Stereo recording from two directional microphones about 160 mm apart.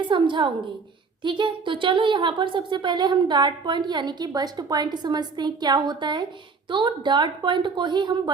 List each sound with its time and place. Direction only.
0.1 s a woman's voice: 30° right (ahead or behind)